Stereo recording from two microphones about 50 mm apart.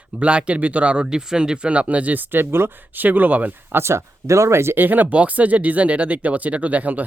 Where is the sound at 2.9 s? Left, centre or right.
Right.